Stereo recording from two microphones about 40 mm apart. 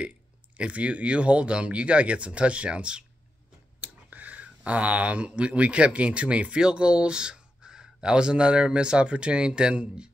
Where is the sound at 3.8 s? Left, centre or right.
Right.